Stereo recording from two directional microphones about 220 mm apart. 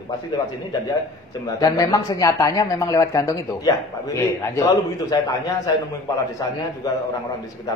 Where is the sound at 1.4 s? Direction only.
15° left (ahead or behind).